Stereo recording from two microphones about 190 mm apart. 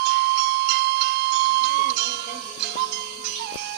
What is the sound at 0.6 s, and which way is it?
Music, 65° right (ahead or behind).